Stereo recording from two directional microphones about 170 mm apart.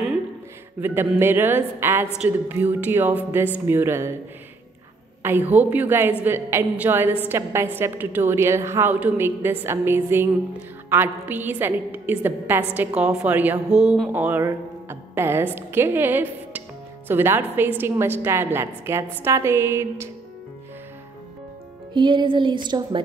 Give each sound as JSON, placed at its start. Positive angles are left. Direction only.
{"t": 0.7, "sound": "a woman's voice", "side_deg": -10}
{"t": 5.2, "sound": "a woman's voice", "side_deg": -10}
{"t": 21.9, "sound": "speech", "side_deg": -30}